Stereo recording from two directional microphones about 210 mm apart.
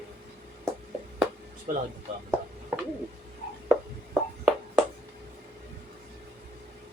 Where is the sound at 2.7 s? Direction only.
10° right (ahead or behind).